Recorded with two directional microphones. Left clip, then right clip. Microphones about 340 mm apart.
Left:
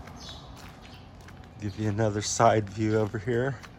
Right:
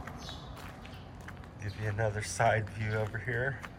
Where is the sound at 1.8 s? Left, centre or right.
Left.